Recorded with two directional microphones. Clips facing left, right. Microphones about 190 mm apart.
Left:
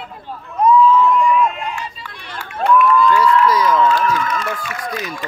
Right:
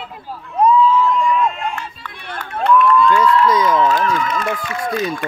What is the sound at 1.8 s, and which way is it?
Run, 55° right (ahead or behind).